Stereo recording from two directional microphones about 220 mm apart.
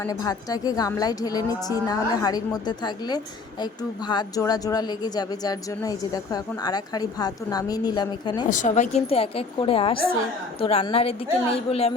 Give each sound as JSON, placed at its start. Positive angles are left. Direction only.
{"t": 0.0, "sound": "a woman's voice", "side_deg": 15}
{"t": 8.4, "sound": "a woman's voice", "side_deg": 35}